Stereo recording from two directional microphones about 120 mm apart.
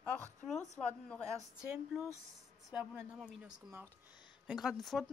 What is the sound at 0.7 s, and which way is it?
Speech, 5° left (ahead or behind).